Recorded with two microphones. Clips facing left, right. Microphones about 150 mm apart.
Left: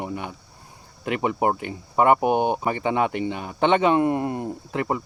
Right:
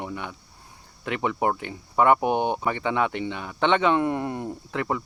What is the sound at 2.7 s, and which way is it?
Speech, 40° left (ahead or behind).